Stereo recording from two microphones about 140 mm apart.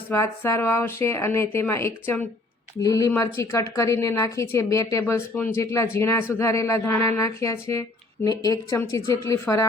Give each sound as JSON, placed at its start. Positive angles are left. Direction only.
{"t": 0.1, "sound": "speech", "side_deg": 20}